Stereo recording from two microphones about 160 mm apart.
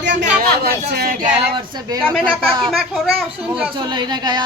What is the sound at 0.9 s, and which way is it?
Speech, 75° right (ahead or behind).